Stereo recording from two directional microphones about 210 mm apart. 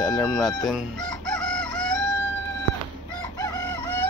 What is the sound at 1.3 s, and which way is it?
Chicken, 5° left (ahead or behind).